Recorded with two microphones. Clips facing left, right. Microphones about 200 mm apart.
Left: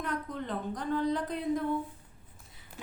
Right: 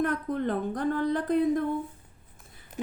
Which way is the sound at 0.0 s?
55° right (ahead or behind).